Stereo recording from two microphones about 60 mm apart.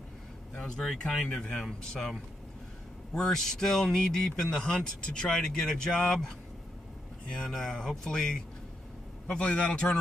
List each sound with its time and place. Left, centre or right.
0.6 s a man's voice: centre
7.3 s a man's voice: centre